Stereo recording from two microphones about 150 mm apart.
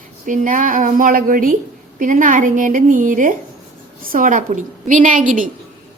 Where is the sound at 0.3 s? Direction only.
65° right (ahead or behind).